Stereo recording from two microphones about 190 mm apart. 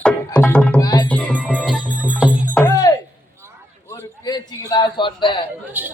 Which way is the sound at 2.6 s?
20° left (ahead or behind).